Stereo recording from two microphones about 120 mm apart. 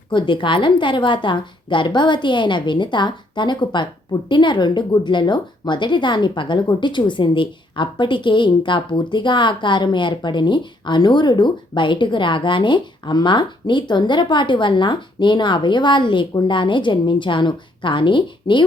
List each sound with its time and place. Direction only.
0.1 s a woman's voice: 40° left (ahead or behind)